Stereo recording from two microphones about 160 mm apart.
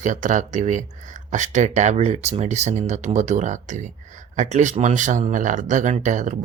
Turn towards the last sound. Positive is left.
turn(degrees=-50)  # may be behind; listen again after turning